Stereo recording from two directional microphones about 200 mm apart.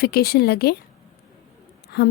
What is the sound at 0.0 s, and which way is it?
Speech, 50° left (ahead or behind).